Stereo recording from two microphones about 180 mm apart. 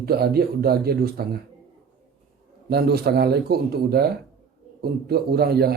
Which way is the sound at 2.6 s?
60° right (ahead or behind).